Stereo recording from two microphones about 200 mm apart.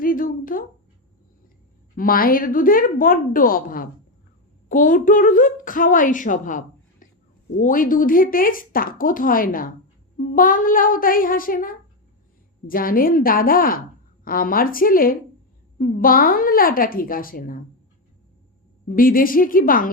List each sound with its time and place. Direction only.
0.0 s a sound: 45° left (ahead or behind)
2.0 s a woman's voice: 45° left (ahead or behind)
18.9 s a woman's voice: 45° left (ahead or behind)